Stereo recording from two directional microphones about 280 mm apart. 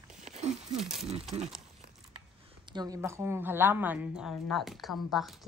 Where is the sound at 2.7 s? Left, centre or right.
Centre.